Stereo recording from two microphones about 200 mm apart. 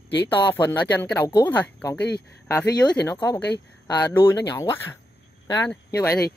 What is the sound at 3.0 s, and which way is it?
Speech, 20° left (ahead or behind).